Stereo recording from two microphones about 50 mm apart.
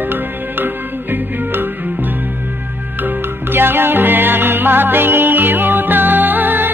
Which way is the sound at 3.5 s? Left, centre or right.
Right.